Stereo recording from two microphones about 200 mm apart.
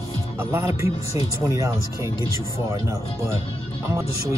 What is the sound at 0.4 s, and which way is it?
Speech, 10° right (ahead or behind).